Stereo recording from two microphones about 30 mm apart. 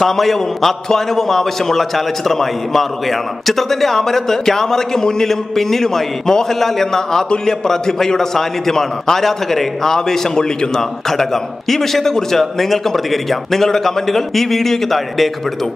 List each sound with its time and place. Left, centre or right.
0.0 s a man's voice: centre